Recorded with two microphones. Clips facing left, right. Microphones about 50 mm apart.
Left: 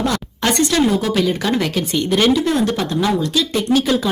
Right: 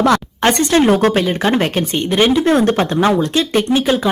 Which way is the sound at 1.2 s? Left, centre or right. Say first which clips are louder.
Right 2 dB; right.